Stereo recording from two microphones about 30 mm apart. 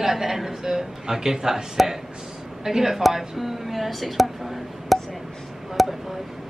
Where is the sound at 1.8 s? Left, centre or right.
Centre.